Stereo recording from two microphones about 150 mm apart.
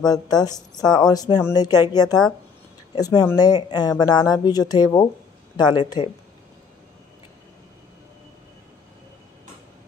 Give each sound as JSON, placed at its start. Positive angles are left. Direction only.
{"t": 0.0, "sound": "speech", "side_deg": 25}